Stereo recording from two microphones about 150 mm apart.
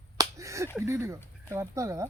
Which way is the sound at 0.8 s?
20° right (ahead or behind).